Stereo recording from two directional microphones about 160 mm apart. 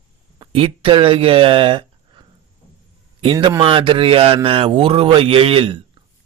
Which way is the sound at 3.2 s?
35° right (ahead or behind).